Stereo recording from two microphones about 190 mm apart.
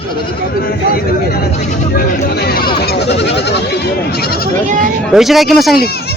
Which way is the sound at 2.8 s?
60° left (ahead or behind).